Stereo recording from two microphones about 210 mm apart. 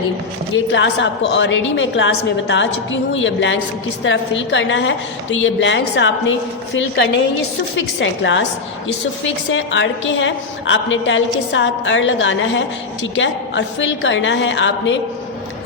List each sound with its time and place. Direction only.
0.5 s a woman's voice: 60° left (ahead or behind)
7.8 s a woman's voice: 60° left (ahead or behind)